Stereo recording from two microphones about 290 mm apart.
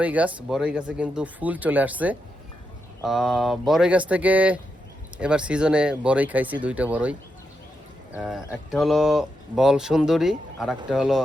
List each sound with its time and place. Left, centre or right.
0.0 s speech: centre